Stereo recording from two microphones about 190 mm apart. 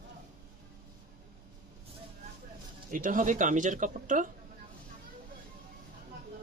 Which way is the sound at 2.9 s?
45° right (ahead or behind).